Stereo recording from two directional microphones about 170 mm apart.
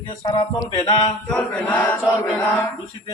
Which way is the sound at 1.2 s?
5° left (ahead or behind).